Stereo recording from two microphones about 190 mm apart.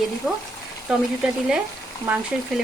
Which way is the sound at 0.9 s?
5° right (ahead or behind).